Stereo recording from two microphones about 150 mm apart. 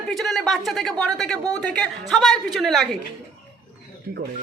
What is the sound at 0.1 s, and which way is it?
A woman's voice, centre (ahead or behind).